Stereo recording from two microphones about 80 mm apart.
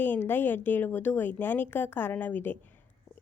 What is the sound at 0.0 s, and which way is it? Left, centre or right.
Speech, left.